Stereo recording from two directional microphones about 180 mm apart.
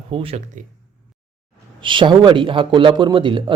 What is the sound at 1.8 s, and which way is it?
A man's voice, 25° right (ahead or behind).